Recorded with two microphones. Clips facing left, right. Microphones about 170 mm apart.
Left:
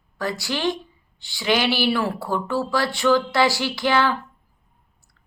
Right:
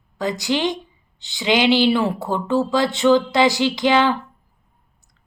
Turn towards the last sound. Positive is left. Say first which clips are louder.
# right 4 dB
turn(degrees=-20)  # may be behind; listen again after turning